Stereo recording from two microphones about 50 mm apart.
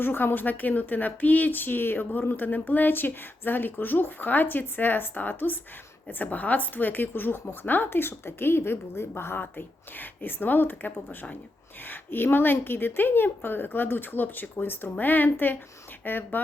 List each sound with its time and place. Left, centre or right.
0.0 s a woman's voice: left